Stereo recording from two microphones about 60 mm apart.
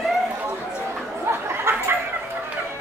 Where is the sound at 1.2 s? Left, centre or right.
Right.